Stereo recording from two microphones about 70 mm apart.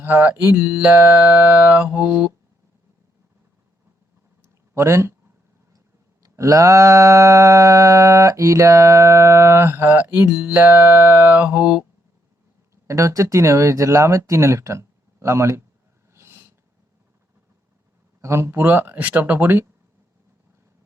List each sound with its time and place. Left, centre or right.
0.0 s music: right
4.4 s a sound: right
6.2 s mantra: right
12.7 s mantra: right
16.1 s snort: right
18.2 s speech: right
19.3 s music: right